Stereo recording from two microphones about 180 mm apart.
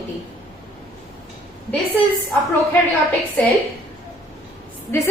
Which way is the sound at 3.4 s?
10° left (ahead or behind).